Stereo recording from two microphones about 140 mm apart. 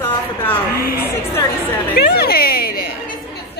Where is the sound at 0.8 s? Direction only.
90° left.